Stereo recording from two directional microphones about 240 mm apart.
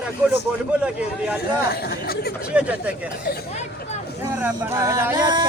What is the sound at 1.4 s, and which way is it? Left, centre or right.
Speech, left.